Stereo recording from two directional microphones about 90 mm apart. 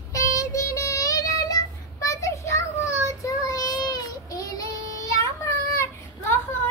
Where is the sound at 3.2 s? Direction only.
40° left (ahead or behind).